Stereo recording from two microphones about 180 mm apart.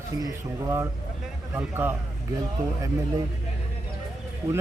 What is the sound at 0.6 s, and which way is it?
A man's voice, 15° right (ahead or behind).